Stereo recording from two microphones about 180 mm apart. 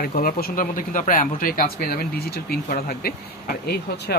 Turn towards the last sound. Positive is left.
turn(degrees=60)  # may be behind; listen again after turning